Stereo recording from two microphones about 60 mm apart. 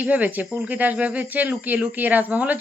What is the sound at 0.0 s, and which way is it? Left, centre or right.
Speech, right.